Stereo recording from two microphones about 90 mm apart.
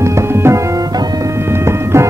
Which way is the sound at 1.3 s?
30° right (ahead or behind).